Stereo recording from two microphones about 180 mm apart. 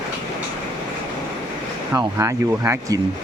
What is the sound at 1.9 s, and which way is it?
Speech, 15° right (ahead or behind).